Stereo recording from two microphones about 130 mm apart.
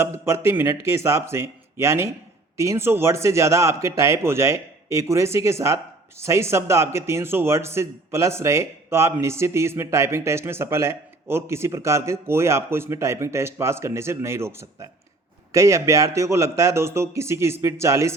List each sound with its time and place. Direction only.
0.0 s a man's voice: 20° right (ahead or behind)